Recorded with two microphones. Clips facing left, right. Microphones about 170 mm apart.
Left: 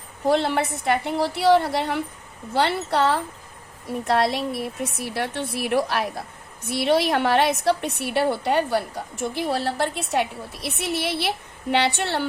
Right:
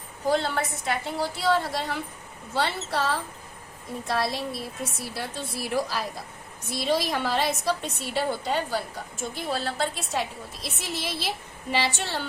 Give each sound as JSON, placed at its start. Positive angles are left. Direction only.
{"t": 0.3, "sound": "a woman's voice", "side_deg": 65}